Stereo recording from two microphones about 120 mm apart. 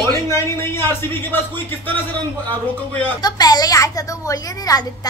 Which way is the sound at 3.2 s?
35° left (ahead or behind).